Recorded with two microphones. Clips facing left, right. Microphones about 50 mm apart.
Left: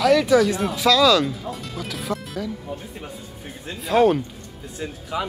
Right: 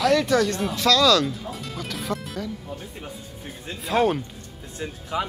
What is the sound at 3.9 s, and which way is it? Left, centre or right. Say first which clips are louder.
Speech: left 4 dB; centre.